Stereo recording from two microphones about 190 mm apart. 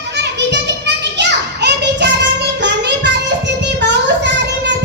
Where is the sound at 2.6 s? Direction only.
65° right (ahead or behind).